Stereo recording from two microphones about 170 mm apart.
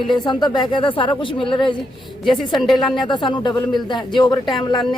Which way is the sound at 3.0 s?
25° left (ahead or behind).